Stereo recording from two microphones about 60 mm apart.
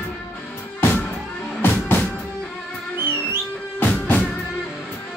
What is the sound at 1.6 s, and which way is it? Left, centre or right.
Music, left.